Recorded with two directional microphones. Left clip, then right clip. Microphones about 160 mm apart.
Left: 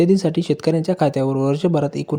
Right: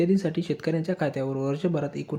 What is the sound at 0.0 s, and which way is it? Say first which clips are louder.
Speech: left 8 dB; 40° left (ahead or behind).